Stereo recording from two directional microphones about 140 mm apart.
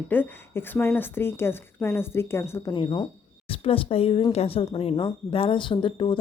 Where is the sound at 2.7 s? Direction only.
35° left (ahead or behind).